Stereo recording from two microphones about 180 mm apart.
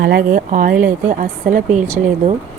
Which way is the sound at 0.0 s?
60° right (ahead or behind).